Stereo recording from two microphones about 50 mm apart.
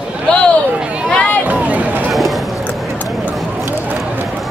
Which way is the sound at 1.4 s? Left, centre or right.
Right.